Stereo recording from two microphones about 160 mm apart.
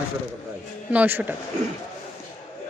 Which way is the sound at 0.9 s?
10° right (ahead or behind).